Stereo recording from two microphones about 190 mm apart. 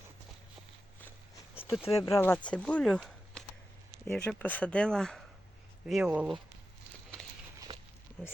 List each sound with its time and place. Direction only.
1.8 s speech: 15° left (ahead or behind); by 6.4 s 5° right (ahead or behind)
7.7 s a sound: 25° right (ahead or behind)
8.2 s speech: centre (ahead or behind)